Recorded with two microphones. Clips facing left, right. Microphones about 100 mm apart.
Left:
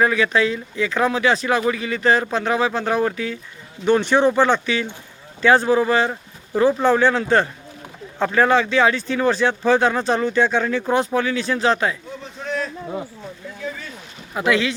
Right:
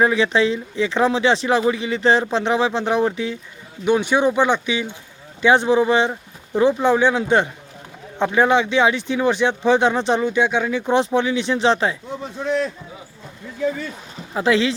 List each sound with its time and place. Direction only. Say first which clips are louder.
0.0 s speech: right 1 dB; 25° right (ahead or behind)
3.8 s speech: left 1 dB; 10° right (ahead or behind)
14.3 s speech: right 2 dB; 30° right (ahead or behind)